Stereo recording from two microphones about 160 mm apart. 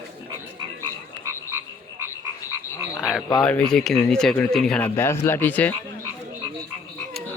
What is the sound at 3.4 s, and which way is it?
Speech, 5° left (ahead or behind).